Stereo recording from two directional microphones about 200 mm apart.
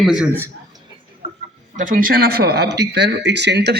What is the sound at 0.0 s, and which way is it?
Speech, 5° right (ahead or behind).